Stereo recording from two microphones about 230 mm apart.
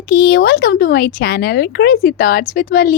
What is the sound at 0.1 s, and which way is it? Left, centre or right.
Speech, left.